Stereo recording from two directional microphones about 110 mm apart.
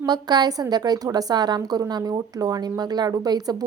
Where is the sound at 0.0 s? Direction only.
40° right (ahead or behind).